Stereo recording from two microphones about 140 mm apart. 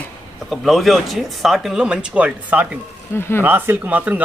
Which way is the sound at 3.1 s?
15° left (ahead or behind).